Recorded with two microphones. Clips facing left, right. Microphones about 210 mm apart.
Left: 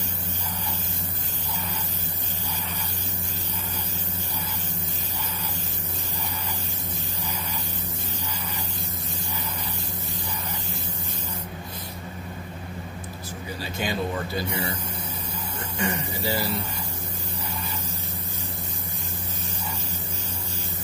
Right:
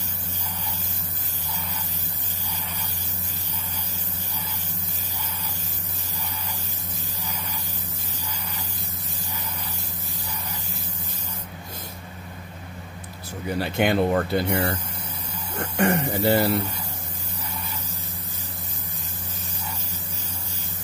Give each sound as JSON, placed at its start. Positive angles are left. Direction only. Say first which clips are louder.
{"t": 13.6, "sound": "speech", "louder": "right 8 dB", "side_deg": -60}